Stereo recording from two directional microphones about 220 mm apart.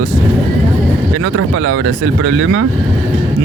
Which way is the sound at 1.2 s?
85° right.